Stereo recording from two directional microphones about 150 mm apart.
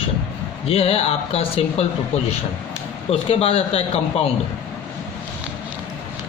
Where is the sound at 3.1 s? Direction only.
40° left (ahead or behind).